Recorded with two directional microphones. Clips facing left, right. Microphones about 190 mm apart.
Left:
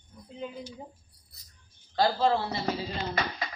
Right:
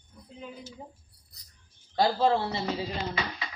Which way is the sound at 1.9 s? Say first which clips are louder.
Right 1 dB; 20° right (ahead or behind).